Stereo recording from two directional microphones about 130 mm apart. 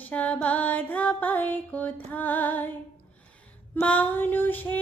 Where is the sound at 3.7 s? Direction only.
10° left (ahead or behind).